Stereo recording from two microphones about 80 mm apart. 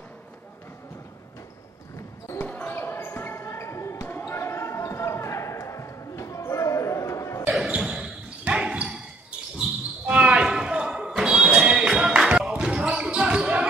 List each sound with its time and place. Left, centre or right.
2.4 s basketball bounce: left
7.7 s basketball bounce: centre